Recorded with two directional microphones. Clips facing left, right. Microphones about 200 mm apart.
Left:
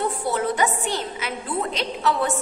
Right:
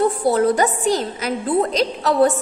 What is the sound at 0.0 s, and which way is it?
A woman's voice, 35° right (ahead or behind).